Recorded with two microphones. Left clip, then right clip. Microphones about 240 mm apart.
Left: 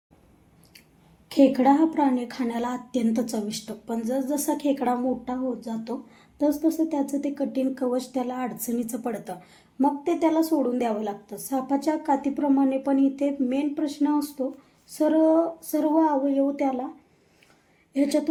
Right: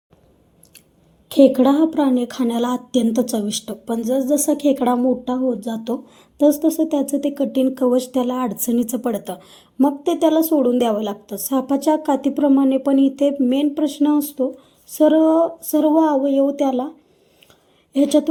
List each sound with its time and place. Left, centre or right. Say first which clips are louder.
1.3 s a woman's voice: right 6 dB; right
17.9 s a woman's voice: right 7 dB; right